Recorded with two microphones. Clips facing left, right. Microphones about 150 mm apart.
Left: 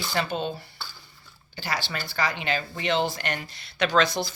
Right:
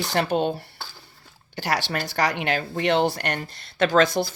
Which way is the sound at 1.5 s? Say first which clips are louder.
Right 6 dB; 75° right (ahead or behind).